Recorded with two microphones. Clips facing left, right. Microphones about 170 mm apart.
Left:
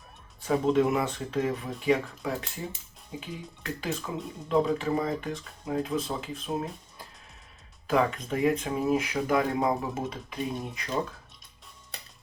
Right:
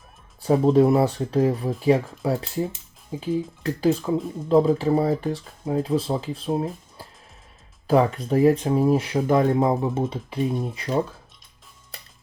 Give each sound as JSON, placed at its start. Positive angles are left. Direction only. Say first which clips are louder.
{"t": 0.4, "sound": "speech", "louder": "right 7 dB", "side_deg": -35}
{"t": 7.9, "sound": "speech", "louder": "right 6 dB", "side_deg": -35}